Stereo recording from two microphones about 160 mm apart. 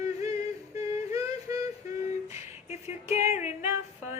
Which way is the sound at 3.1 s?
15° right (ahead or behind).